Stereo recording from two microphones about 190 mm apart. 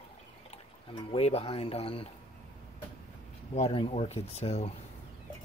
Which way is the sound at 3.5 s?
30° left (ahead or behind).